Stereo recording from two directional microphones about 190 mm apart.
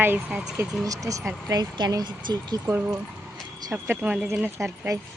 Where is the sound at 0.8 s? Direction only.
15° right (ahead or behind).